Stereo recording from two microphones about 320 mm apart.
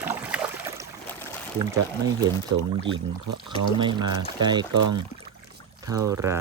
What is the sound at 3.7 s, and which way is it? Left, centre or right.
Speech, centre.